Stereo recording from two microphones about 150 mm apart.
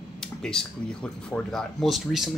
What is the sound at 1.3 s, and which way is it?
Speech, centre (ahead or behind).